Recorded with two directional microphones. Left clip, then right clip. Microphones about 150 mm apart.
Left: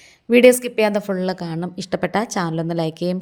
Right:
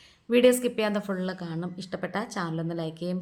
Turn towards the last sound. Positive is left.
turn(degrees=50)  # may be behind; listen again after turning